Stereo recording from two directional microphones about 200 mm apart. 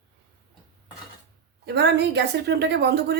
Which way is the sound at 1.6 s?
55° right (ahead or behind).